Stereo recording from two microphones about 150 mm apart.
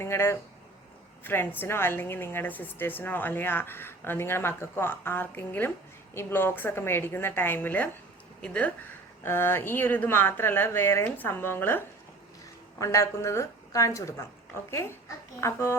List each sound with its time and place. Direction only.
0.0 s a woman's voice: 15° left (ahead or behind)
12.8 s a woman's voice: 20° left (ahead or behind)